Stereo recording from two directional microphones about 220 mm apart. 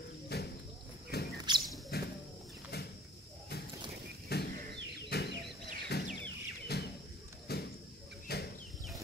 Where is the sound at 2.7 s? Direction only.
45° left (ahead or behind).